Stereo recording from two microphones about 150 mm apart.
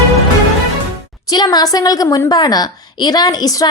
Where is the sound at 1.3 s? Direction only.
25° left (ahead or behind).